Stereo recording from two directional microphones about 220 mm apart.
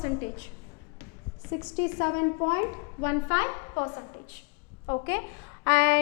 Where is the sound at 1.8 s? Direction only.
15° left (ahead or behind).